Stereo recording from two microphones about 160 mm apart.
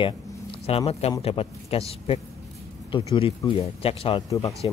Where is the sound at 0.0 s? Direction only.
35° left (ahead or behind).